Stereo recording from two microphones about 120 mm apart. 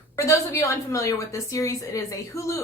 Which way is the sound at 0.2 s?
25° left (ahead or behind).